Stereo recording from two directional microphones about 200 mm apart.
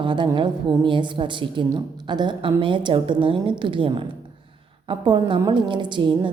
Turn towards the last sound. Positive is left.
turn(degrees=-25)  # may be behind; listen again after turning